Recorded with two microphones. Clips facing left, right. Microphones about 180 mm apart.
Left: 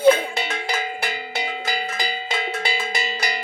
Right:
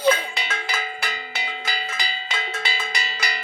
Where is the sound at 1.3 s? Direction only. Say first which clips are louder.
Left 4 dB; 50° left (ahead or behind).